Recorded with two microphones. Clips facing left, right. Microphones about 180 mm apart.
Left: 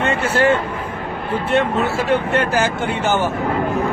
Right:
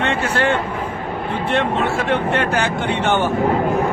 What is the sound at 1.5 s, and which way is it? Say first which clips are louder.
Speech: left 1 dB; centre (ahead or behind).